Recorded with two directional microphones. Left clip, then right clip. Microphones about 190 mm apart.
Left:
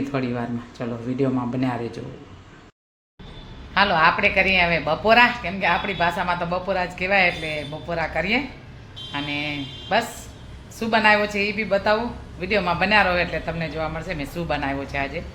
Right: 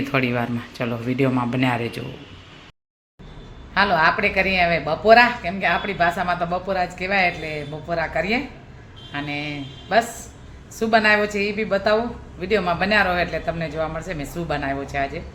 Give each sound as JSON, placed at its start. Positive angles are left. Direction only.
{"t": 0.0, "sound": "a man's voice", "side_deg": -5}
{"t": 3.8, "sound": "a man's voice", "side_deg": -5}